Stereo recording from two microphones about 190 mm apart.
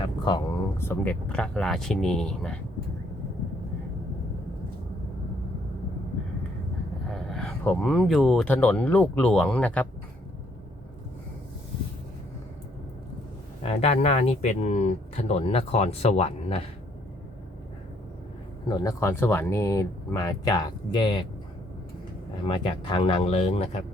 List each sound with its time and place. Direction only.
0.3 s speech: 15° left (ahead or behind)
7.1 s speech: centre (ahead or behind)
13.6 s speech: 35° left (ahead or behind)
18.7 s speech: 15° left (ahead or behind)
22.4 s speech: 25° left (ahead or behind)